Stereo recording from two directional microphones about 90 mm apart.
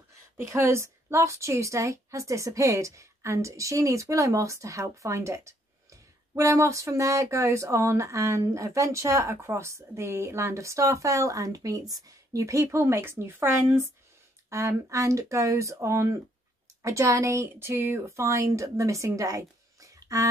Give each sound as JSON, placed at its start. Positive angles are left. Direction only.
{"t": 0.4, "sound": "a woman's voice", "side_deg": -30}